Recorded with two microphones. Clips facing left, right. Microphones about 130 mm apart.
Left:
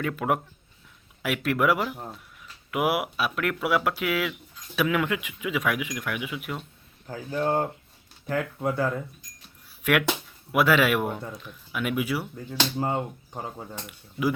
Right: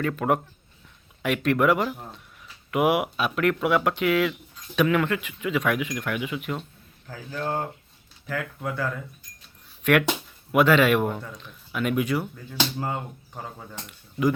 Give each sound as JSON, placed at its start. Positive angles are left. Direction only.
{"t": 0.0, "sound": "speech", "side_deg": 5}
{"t": 7.1, "sound": "speech", "side_deg": 20}
{"t": 8.3, "sound": "speech", "side_deg": 30}
{"t": 9.8, "sound": "speech", "side_deg": 10}
{"t": 12.7, "sound": "speech", "side_deg": 20}
{"t": 13.8, "sound": "speech", "side_deg": 5}